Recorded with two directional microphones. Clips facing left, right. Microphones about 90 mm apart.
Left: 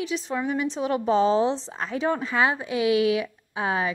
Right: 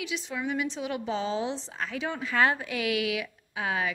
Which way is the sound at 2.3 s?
20° left (ahead or behind).